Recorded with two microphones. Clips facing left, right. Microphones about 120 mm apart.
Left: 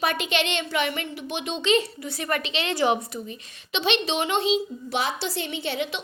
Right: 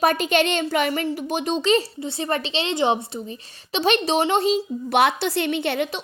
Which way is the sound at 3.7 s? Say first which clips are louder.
Right 5 dB; 40° right (ahead or behind).